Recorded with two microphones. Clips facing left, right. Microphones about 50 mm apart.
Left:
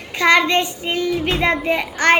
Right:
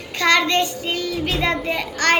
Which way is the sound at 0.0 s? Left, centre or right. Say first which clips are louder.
Left 3 dB; centre.